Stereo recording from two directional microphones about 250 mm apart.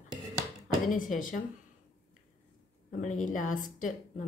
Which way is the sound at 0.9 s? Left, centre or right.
Left.